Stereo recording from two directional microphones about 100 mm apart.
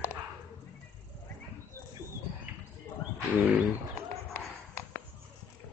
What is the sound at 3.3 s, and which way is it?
Speech, 20° right (ahead or behind).